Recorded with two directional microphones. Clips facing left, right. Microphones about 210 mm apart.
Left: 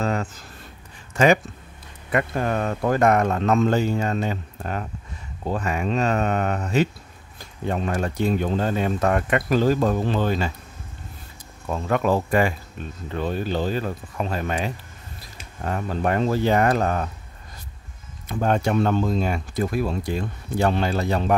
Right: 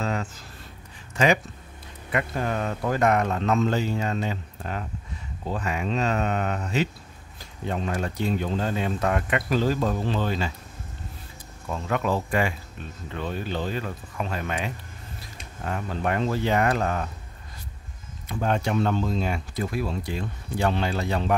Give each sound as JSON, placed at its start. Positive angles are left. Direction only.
{"t": 0.0, "sound": "a sound", "side_deg": 50}
{"t": 1.1, "sound": "speech", "side_deg": 50}
{"t": 11.7, "sound": "speech", "side_deg": 50}
{"t": 18.4, "sound": "speech", "side_deg": 50}